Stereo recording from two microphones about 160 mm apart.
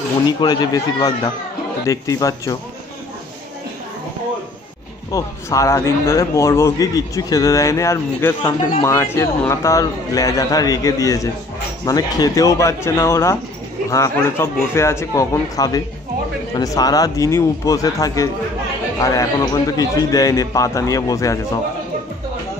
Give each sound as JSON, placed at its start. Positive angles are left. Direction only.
{"t": 0.4, "sound": "a man's voice", "side_deg": 25}
{"t": 5.1, "sound": "a man's voice", "side_deg": 20}